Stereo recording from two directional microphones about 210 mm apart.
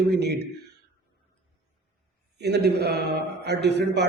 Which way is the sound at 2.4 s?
50° right (ahead or behind).